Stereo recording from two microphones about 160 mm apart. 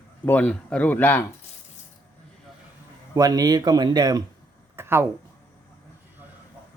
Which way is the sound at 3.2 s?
20° right (ahead or behind).